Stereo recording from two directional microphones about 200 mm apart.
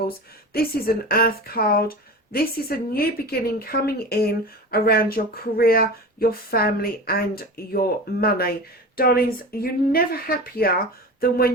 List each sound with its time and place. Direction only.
0.5 s a woman's voice: 50° left (ahead or behind)